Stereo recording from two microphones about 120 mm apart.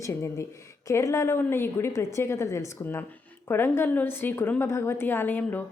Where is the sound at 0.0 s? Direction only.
25° left (ahead or behind).